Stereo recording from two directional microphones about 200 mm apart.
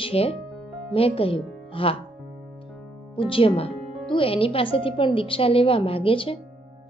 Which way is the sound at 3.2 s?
25° left (ahead or behind).